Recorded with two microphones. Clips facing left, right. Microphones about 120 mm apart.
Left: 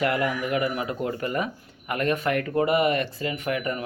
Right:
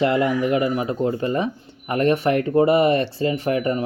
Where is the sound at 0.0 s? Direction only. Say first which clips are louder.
Right 6 dB; 25° right (ahead or behind).